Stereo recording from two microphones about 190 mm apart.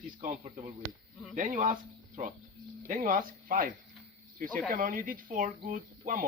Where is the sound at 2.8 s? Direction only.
45° right (ahead or behind).